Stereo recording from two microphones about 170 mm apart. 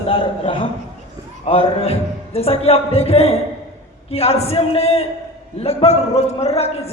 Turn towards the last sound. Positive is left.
turn(degrees=40)  # may be behind; listen again after turning